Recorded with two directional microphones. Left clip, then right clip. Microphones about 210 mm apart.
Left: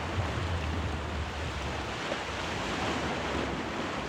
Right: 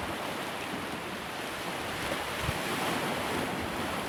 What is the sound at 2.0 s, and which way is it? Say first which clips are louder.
Waves: right 1 dB; 45° right (ahead or behind).